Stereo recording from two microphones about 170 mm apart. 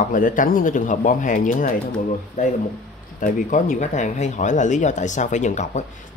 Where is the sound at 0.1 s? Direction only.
55° left (ahead or behind).